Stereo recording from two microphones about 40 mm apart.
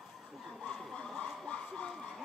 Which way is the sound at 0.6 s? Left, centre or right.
Left.